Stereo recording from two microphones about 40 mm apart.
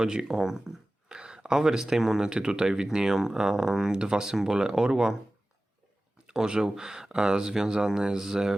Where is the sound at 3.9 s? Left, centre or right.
Centre.